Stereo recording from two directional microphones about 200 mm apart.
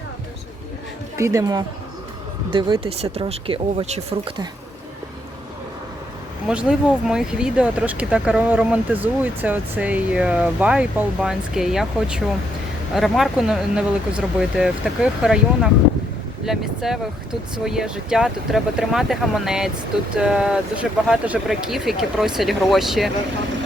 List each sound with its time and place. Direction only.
1.1 s speech: 15° right (ahead or behind)
6.5 s speech: 5° right (ahead or behind)